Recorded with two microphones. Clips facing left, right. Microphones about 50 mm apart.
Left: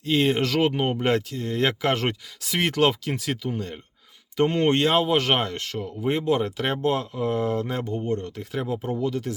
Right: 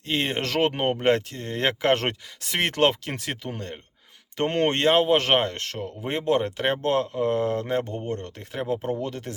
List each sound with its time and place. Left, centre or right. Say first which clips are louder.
0.0 s speech: left 5 dB; right